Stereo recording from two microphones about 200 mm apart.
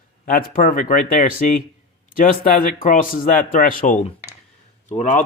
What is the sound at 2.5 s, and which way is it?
Speech, 45° left (ahead or behind).